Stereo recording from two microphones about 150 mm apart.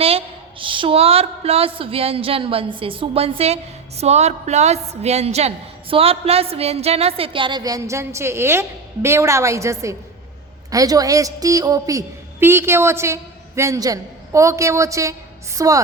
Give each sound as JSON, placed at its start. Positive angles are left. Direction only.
{"t": 0.6, "sound": "a woman's voice", "side_deg": -35}